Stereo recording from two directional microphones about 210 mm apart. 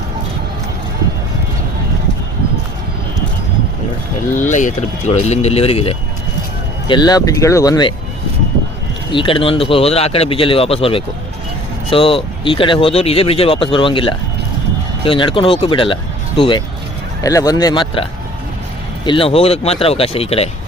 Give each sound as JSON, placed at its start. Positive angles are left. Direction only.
{"t": 4.4, "sound": "speech", "side_deg": 35}
{"t": 9.1, "sound": "speech", "side_deg": 25}